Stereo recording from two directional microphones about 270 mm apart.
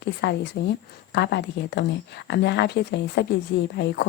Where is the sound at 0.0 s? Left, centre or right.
Left.